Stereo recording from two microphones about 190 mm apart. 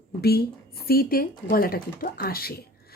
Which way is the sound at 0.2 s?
55° left (ahead or behind).